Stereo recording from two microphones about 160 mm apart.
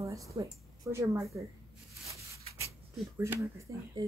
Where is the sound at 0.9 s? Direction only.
20° right (ahead or behind).